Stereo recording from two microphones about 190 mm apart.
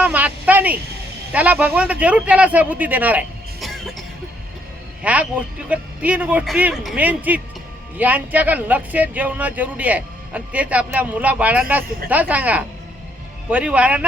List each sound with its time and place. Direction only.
0.0 s speech: 10° right (ahead or behind)
5.0 s speech: 5° right (ahead or behind)